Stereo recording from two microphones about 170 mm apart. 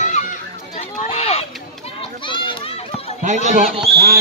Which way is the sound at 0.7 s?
35° left (ahead or behind).